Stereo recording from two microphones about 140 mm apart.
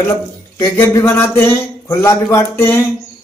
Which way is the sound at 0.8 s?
20° left (ahead or behind).